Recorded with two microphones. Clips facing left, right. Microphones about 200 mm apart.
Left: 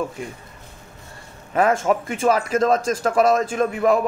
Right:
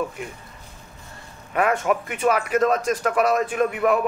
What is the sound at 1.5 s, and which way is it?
A man's voice, 30° left (ahead or behind).